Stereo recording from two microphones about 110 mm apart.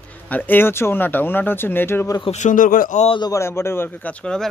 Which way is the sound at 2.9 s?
90° left.